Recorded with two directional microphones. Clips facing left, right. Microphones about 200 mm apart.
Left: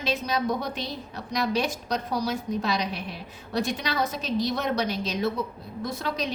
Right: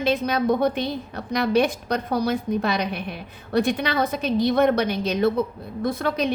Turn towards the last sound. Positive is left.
turn(degrees=-55)  # may be behind; listen again after turning